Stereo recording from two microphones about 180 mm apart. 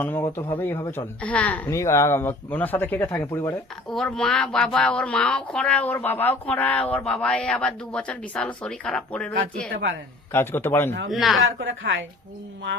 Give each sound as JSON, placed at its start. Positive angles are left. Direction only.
{"t": 0.0, "sound": "speech", "side_deg": 10}
{"t": 10.3, "sound": "speech", "side_deg": 15}
{"t": 11.1, "sound": "speech", "side_deg": 0}
{"t": 11.3, "sound": "speech", "side_deg": -90}